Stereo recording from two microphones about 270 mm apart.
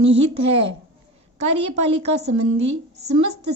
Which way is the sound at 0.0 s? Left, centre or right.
Right.